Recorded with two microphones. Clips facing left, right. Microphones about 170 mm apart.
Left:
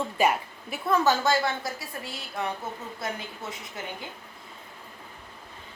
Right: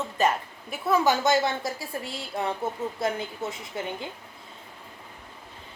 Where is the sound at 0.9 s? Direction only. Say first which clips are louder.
Right 1 dB; 15° right (ahead or behind).